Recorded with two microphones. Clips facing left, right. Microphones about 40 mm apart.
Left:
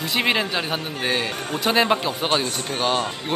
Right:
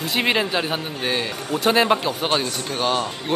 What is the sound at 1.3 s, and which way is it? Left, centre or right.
Speech, left.